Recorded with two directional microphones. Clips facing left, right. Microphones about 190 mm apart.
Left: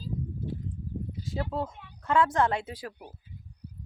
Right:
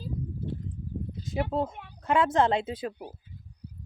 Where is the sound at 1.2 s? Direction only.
20° right (ahead or behind).